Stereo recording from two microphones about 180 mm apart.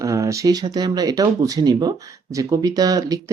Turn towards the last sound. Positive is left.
turn(degrees=-20)  # may be behind; listen again after turning